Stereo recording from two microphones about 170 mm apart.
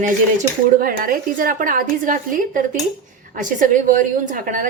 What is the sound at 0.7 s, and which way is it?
A woman's voice, 55° right (ahead or behind).